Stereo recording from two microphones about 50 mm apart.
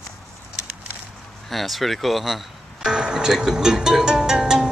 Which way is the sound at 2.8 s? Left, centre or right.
Centre.